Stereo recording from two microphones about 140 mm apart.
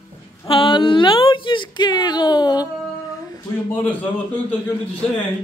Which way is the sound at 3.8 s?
10° left (ahead or behind).